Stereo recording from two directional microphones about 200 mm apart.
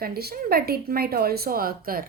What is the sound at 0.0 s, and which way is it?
A woman's voice, 50° right (ahead or behind).